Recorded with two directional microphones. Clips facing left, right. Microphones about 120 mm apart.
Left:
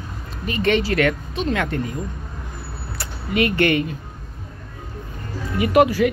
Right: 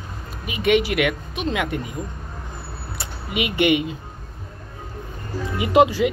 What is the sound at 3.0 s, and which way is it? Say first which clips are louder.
Speech: left 5 dB; 15° right (ahead or behind).